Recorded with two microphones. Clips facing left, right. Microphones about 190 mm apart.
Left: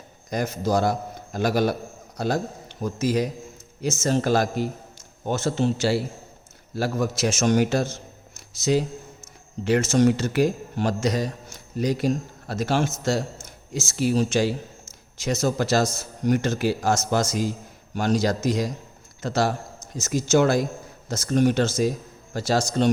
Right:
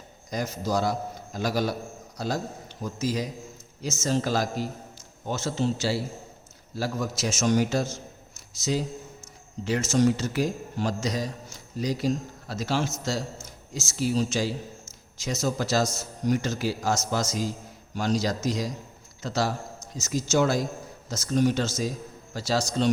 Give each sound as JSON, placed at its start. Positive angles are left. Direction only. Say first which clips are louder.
{"t": 0.3, "sound": "a man's voice", "louder": "left 4 dB", "side_deg": 55}
{"t": 9.6, "sound": "a man's voice", "louder": "left 4 dB", "side_deg": 65}